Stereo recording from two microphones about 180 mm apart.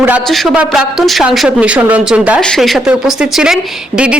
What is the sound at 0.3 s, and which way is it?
A woman's voice, centre (ahead or behind).